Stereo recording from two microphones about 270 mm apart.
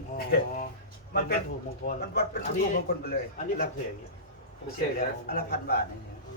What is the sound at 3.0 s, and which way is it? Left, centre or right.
Speech, left.